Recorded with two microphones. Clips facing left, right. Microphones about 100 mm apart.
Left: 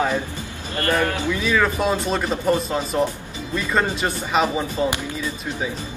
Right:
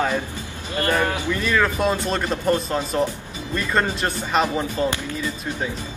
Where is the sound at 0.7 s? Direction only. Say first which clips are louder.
Even; 20° right (ahead or behind).